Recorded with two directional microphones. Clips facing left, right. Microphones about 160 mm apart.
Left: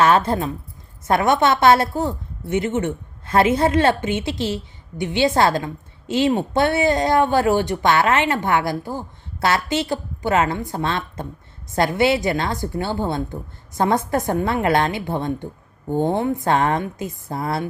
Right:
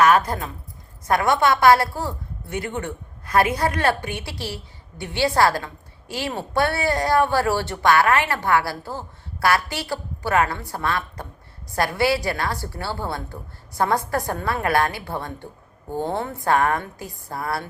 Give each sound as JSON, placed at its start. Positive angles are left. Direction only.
{"t": 0.0, "sound": "a woman's voice", "side_deg": 25}